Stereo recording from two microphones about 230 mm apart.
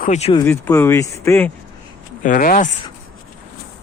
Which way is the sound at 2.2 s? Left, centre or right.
Left.